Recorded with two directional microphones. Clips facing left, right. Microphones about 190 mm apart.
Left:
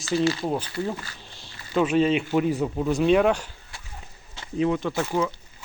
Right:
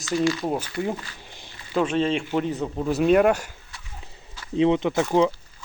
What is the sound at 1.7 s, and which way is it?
Speech, 5° left (ahead or behind).